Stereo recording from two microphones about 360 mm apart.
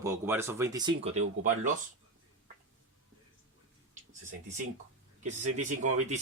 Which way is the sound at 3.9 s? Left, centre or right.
Right.